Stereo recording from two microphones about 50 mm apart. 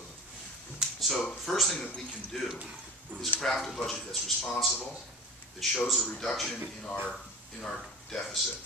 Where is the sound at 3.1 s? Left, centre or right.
Right.